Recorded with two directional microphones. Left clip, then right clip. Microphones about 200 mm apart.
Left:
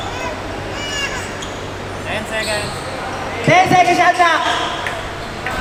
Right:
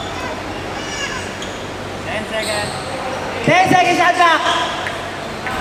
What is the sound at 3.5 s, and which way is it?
Speech, 5° right (ahead or behind).